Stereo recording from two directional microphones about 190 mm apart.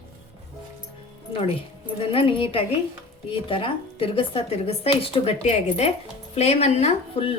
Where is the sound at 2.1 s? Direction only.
30° left (ahead or behind).